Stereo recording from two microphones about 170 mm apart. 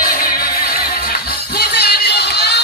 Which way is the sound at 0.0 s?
60° left (ahead or behind).